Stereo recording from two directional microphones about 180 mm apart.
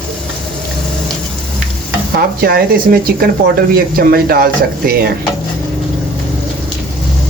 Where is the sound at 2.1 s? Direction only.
55° right (ahead or behind).